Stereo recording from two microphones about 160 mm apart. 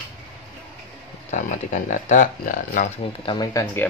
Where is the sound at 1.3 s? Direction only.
50° left (ahead or behind).